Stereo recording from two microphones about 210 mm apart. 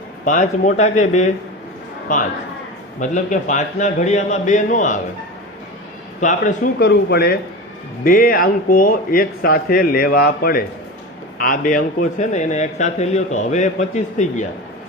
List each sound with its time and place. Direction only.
0.3 s speech: 35° left (ahead or behind)
6.1 s speech: 35° left (ahead or behind)